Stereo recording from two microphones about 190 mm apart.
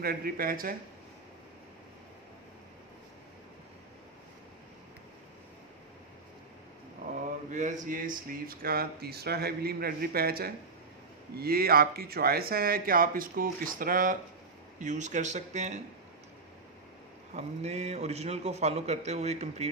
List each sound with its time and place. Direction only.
0.0 s speech: 50° right (ahead or behind)
7.5 s a man's voice: 40° right (ahead or behind)
17.3 s a man's voice: 35° right (ahead or behind)